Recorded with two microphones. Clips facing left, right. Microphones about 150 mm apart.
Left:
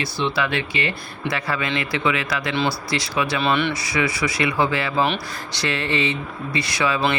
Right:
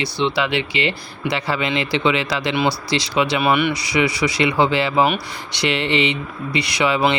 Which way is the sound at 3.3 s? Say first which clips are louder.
Right 2 dB; 10° right (ahead or behind).